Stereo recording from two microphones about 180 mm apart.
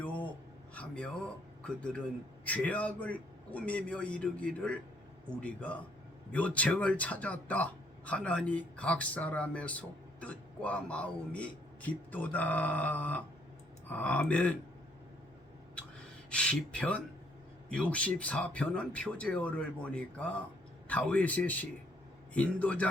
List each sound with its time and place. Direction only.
0.7 s a sound: 5° left (ahead or behind)
1.6 s speech: 5° left (ahead or behind)
15.8 s gasp: 5° left (ahead or behind)
16.3 s speech: 5° left (ahead or behind)